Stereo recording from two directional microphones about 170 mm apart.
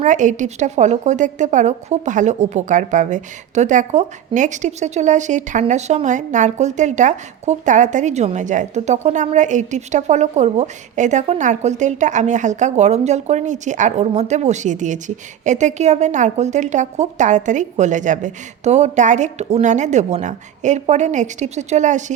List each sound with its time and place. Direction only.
0.0 s speech: 45° right (ahead or behind)